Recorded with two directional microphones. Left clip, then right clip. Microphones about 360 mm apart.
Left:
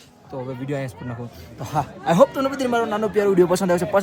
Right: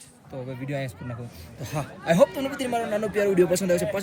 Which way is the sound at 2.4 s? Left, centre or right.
Centre.